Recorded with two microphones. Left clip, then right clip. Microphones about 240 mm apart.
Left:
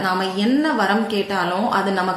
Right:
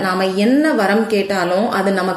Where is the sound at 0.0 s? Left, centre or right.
Centre.